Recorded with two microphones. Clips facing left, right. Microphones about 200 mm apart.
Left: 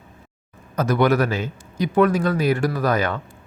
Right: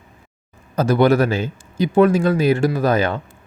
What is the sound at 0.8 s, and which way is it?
Speech, 30° right (ahead or behind).